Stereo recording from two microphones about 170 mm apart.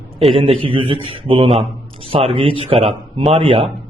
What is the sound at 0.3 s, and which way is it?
A man's voice, 30° right (ahead or behind).